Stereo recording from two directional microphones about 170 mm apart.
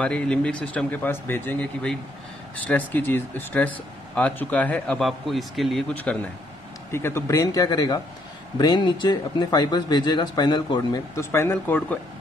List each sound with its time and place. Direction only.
0.0 s speech: 5° left (ahead or behind); by 11.0 s 25° left (ahead or behind)
11.1 s speech: 15° left (ahead or behind)